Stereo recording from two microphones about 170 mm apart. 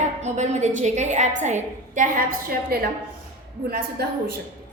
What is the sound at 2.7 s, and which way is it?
Speech, 60° right (ahead or behind).